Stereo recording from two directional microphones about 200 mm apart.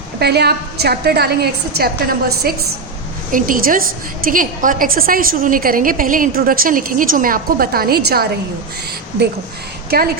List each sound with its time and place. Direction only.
0.2 s a woman's voice: 55° right (ahead or behind)